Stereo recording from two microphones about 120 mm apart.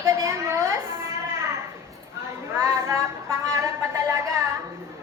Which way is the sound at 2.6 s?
20° right (ahead or behind).